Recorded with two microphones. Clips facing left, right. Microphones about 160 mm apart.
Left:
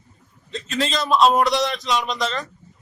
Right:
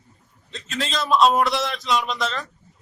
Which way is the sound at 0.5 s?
Centre (ahead or behind).